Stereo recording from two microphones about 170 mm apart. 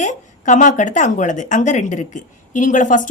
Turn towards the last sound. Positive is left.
turn(degrees=50)  # may be behind; listen again after turning